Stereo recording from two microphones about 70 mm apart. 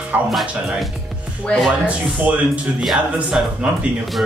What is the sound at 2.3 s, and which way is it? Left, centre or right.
Speech, centre.